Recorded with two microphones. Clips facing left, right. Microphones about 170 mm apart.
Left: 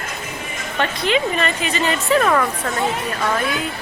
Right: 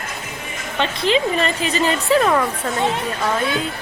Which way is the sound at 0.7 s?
25° right (ahead or behind).